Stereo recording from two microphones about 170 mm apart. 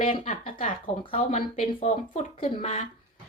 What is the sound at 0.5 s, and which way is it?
A woman's voice, 30° left (ahead or behind).